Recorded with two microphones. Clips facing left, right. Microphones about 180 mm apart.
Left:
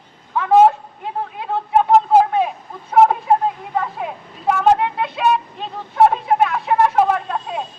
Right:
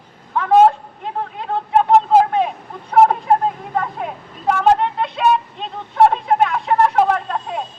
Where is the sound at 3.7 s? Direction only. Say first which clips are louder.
Even; 5° left (ahead or behind).